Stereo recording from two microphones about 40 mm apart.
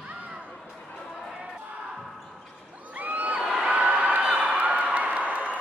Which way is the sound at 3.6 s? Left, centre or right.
Right.